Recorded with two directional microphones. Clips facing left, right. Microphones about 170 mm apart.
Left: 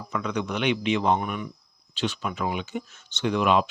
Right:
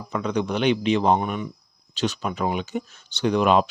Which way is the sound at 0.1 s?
30° right (ahead or behind).